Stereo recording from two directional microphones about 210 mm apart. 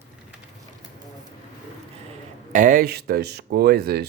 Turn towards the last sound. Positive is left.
turn(degrees=-50)  # may be behind; listen again after turning